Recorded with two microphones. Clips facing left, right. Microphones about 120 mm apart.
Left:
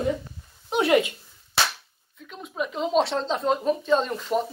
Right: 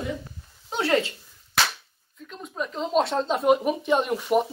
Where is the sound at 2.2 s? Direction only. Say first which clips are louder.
Left 2 dB; 5° left (ahead or behind).